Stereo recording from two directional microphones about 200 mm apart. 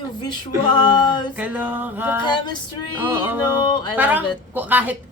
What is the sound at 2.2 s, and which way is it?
Speech, 20° left (ahead or behind).